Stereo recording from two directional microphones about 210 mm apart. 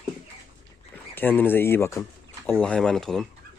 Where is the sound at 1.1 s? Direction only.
10° left (ahead or behind).